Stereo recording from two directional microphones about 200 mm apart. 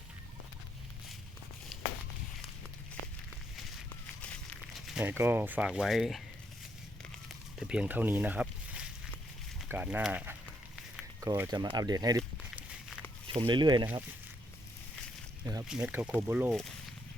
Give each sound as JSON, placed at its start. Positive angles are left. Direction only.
{"t": 1.7, "sound": "walk", "side_deg": 0}
{"t": 3.8, "sound": "walk", "side_deg": 5}
{"t": 4.9, "sound": "speech", "side_deg": -10}
{"t": 7.6, "sound": "speech", "side_deg": -5}
{"t": 12.4, "sound": "walk", "side_deg": -5}
{"t": 13.2, "sound": "speech", "side_deg": -25}
{"t": 15.6, "sound": "speech", "side_deg": -5}